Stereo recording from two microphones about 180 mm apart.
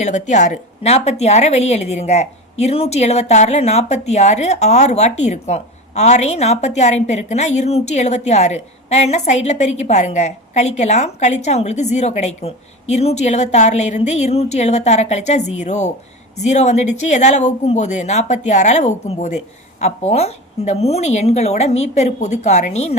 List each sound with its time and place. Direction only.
0.0 s a woman's voice: 40° left (ahead or behind)